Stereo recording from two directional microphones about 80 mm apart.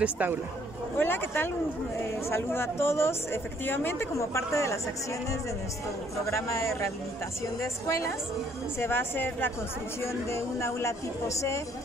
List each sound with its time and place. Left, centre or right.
0.0 s speech: right
0.9 s a woman's voice: left
6.3 s speech: left
8.7 s a woman's voice: left